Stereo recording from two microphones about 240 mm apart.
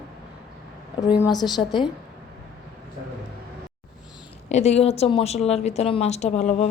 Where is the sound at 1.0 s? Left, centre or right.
Centre.